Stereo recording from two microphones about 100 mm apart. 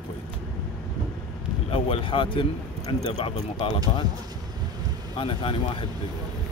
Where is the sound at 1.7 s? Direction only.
65° left (ahead or behind).